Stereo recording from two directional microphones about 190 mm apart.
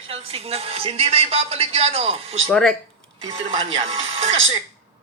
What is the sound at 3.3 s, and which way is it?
Speech, 30° right (ahead or behind).